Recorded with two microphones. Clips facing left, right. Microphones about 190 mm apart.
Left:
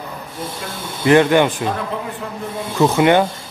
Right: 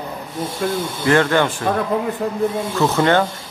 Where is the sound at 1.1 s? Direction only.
15° left (ahead or behind).